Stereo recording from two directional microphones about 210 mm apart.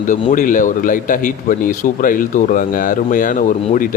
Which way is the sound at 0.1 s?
40° left (ahead or behind).